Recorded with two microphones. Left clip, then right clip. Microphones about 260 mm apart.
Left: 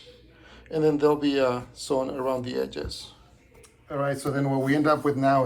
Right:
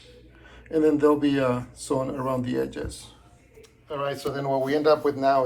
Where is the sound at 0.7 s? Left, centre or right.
Centre.